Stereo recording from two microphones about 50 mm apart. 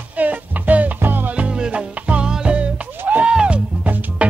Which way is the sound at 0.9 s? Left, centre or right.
Right.